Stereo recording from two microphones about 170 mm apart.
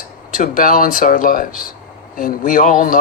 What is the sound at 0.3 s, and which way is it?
A man's voice, 55° left (ahead or behind).